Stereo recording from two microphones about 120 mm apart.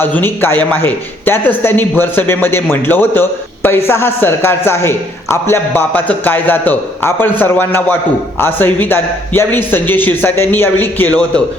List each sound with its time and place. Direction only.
0.0 s a man's voice: 15° left (ahead or behind)